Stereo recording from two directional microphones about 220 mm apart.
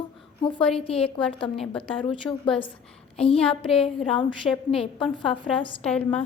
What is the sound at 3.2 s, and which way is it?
A woman's voice, 25° left (ahead or behind).